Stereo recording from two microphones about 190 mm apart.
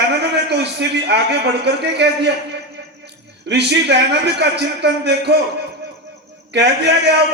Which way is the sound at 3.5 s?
60° right (ahead or behind).